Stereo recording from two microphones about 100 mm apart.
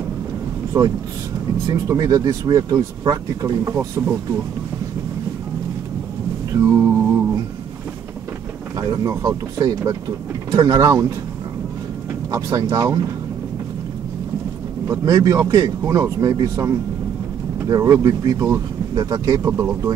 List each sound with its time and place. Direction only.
0.7 s speech: 25° right (ahead or behind)
3.7 s speech: 25° right (ahead or behind)
6.5 s a sound: 25° right (ahead or behind)
8.7 s speech: 40° right (ahead or behind)
9.1 s speech: 25° right (ahead or behind)
9.6 s speech: 40° right (ahead or behind)
12.3 s speech: 35° right (ahead or behind)
14.9 s speech: 35° right (ahead or behind)